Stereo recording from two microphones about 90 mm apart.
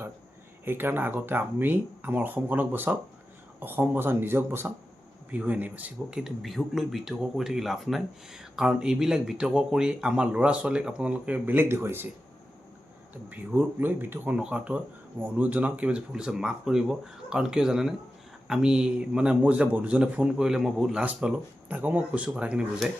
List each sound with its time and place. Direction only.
0.6 s speech: 25° right (ahead or behind)
6.1 s speech: centre (ahead or behind); by 12.0 s 25° right (ahead or behind)
13.3 s speech: 20° right (ahead or behind)